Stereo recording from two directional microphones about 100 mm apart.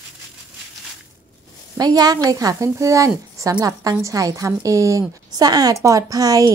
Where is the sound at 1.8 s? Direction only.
40° right (ahead or behind).